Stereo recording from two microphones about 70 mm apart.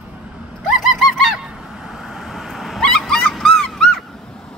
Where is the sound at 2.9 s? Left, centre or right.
Centre.